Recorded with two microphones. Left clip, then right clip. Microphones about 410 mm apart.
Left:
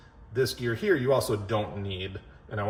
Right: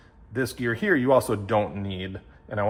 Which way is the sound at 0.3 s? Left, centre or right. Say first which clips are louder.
Right 1 dB; centre.